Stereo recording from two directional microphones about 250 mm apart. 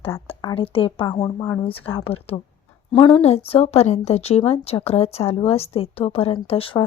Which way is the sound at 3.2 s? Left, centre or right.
Left.